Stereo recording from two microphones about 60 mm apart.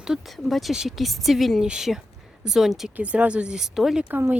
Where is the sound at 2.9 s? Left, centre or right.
Right; by 4.0 s centre.